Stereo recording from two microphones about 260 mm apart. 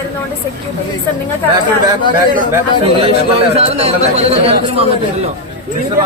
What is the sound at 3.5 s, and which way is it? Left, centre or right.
Speech, right.